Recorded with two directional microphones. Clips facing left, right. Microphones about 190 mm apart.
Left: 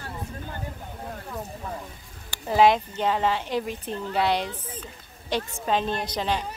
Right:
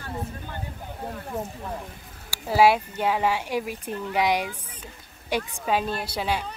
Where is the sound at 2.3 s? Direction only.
10° right (ahead or behind).